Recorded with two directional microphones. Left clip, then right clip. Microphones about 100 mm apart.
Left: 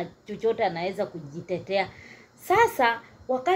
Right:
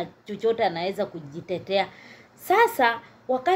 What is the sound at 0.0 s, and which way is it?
A woman's voice, 25° right (ahead or behind).